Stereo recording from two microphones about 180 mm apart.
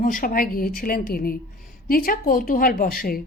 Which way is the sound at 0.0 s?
50° left (ahead or behind).